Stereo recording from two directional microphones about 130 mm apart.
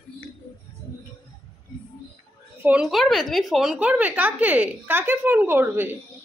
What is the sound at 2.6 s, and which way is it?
A woman's voice, 5° right (ahead or behind).